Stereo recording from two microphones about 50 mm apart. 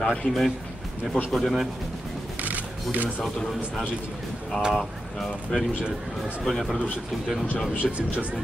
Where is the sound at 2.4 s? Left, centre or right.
Right.